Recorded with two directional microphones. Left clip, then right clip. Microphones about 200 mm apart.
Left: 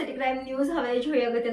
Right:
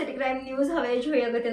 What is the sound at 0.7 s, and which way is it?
Speech, 5° left (ahead or behind).